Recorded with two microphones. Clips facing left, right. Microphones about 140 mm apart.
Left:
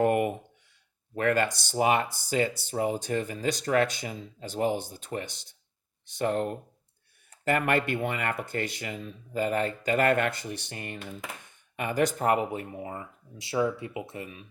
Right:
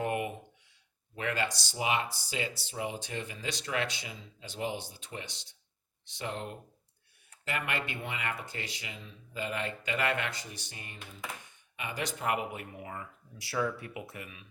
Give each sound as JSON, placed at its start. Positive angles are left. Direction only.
{"t": 0.0, "sound": "a sound", "side_deg": 50}
{"t": 1.1, "sound": "speech", "side_deg": 50}
{"t": 11.8, "sound": "speech", "side_deg": 50}